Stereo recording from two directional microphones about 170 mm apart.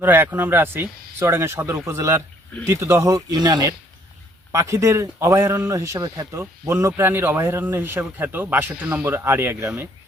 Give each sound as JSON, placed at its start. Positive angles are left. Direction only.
{"t": 0.0, "sound": "a man's voice", "side_deg": -10}